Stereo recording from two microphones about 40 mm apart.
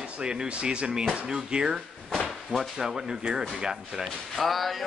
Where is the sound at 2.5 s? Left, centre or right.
Centre.